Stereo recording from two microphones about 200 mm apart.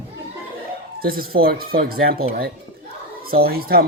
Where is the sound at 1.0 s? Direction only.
45° right (ahead or behind).